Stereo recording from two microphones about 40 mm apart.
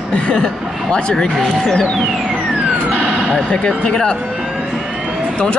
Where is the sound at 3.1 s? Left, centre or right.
Right.